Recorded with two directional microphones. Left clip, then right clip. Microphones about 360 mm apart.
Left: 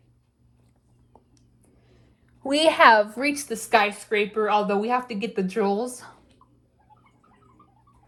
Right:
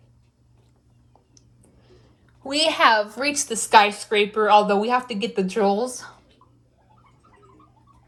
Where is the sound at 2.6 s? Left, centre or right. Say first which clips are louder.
Left 2 dB; centre.